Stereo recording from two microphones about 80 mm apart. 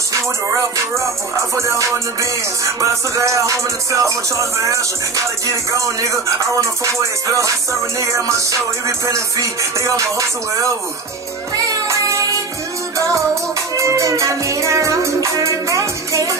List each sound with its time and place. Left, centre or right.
0.1 s music: right